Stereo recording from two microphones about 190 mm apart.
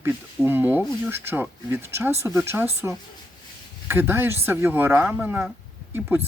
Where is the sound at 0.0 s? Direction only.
10° right (ahead or behind).